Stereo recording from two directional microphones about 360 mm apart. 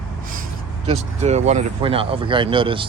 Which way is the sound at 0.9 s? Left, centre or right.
Centre.